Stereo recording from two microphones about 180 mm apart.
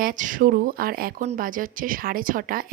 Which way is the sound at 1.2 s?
45° right (ahead or behind).